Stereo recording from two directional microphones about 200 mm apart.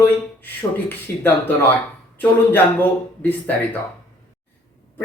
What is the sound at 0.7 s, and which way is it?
Speech, 10° left (ahead or behind).